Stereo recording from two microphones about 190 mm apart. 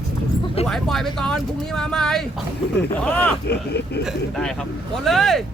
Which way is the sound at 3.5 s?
60° left (ahead or behind).